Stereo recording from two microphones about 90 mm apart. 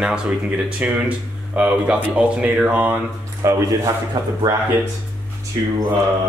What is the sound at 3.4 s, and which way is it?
Speech, 35° right (ahead or behind).